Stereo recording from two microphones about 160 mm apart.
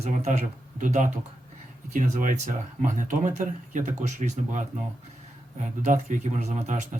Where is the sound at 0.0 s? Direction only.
50° right (ahead or behind).